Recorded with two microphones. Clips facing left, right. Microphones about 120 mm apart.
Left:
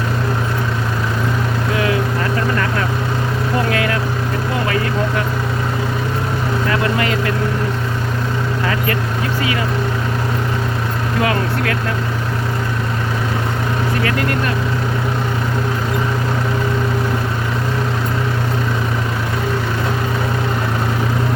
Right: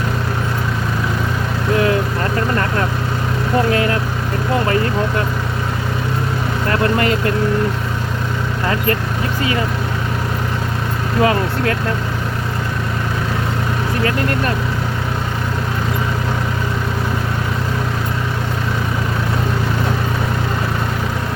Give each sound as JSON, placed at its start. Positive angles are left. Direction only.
{"t": 3.7, "sound": "vehicle", "side_deg": -30}
{"t": 11.2, "sound": "vehicle", "side_deg": -30}